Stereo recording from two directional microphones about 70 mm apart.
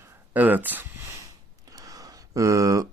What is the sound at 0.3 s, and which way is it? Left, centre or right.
Speech, right.